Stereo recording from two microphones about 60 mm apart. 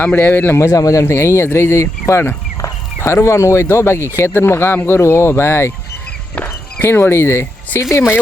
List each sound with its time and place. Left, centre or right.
0.2 s a man's voice: left
0.6 s a man's voice: left
1.0 s speech: left
6.7 s speech: left